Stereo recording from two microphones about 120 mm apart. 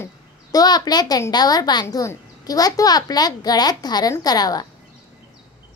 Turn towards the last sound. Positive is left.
turn(degrees=35)  # may be behind; listen again after turning